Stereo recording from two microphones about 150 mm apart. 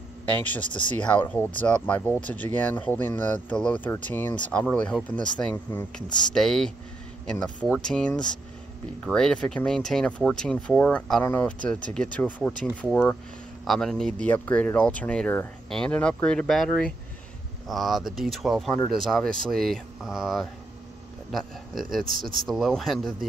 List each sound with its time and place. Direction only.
0.3 s speech: 10° left (ahead or behind)
21.7 s speech: 70° right (ahead or behind)
22.5 s speech: centre (ahead or behind)